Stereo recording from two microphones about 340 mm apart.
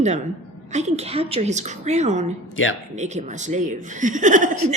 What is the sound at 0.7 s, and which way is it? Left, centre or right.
A woman's voice, centre.